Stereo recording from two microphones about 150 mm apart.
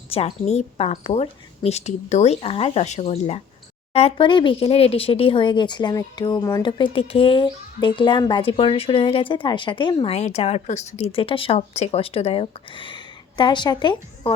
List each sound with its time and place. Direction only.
0.1 s a woman's voice: 45° left (ahead or behind)